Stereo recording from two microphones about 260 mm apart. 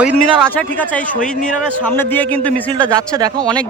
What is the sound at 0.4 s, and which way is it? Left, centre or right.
Speech, centre.